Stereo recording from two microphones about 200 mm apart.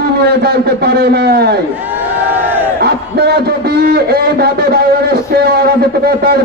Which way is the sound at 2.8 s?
55° right (ahead or behind).